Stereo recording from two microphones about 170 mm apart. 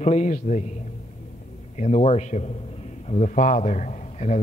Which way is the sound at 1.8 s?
40° left (ahead or behind).